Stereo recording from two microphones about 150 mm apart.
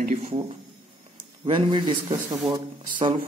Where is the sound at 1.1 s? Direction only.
30° right (ahead or behind).